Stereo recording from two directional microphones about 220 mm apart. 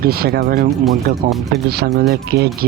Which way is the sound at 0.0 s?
45° right (ahead or behind).